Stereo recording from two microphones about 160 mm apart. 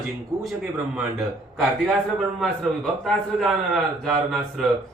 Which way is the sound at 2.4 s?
5° left (ahead or behind).